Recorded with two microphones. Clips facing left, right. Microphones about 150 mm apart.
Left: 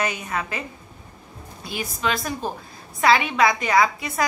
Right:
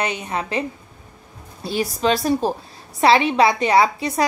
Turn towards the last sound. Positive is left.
turn(degrees=-30)  # may be behind; listen again after turning